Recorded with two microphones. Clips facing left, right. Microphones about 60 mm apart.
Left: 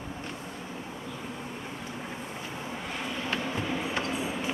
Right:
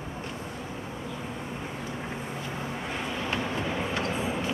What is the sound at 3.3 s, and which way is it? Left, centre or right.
Vehicle, centre.